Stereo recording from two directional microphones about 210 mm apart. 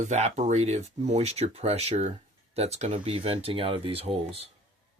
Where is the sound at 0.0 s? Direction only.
35° right (ahead or behind).